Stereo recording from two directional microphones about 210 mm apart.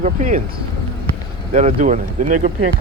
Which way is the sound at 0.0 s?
35° right (ahead or behind).